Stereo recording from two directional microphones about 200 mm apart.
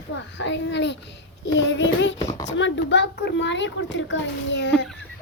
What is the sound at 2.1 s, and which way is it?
Speech, 20° left (ahead or behind).